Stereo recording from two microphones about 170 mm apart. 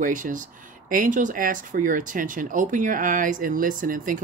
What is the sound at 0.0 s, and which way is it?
Speech, 50° right (ahead or behind).